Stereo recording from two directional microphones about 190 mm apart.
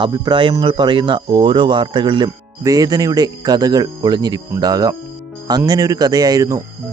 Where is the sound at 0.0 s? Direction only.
25° right (ahead or behind).